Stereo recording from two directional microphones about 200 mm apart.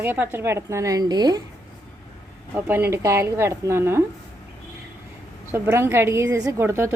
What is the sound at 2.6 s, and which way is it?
A woman's voice, 10° right (ahead or behind).